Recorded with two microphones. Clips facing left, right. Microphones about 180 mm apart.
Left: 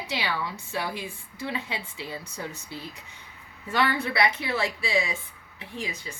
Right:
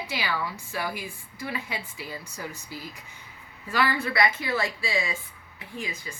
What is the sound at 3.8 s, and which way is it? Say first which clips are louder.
Speech: even; 25° left (ahead or behind).